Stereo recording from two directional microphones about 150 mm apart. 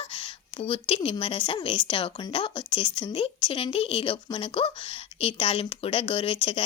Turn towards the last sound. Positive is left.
turn(degrees=40)  # may be behind; listen again after turning